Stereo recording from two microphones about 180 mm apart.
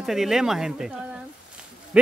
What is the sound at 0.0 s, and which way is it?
Speech, centre (ahead or behind).